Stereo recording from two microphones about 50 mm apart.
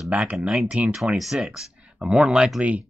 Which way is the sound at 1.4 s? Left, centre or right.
Centre.